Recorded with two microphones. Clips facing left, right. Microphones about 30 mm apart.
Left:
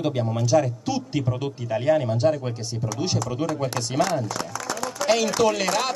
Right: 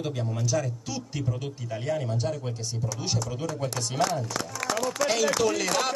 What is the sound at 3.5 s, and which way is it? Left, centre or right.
Speech, left.